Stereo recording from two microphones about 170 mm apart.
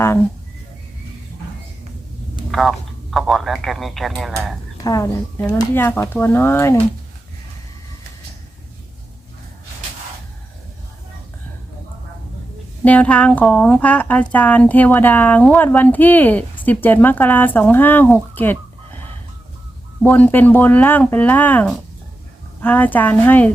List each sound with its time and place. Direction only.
2.5 s speech: centre (ahead or behind)
4.8 s a woman's voice: 20° left (ahead or behind)
12.8 s speech: 10° left (ahead or behind)
20.0 s speech: 10° left (ahead or behind)